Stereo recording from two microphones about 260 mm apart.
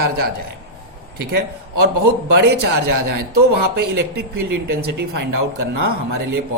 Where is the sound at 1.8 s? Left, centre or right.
Right.